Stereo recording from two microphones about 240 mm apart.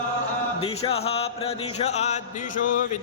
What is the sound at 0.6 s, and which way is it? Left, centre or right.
Music, left.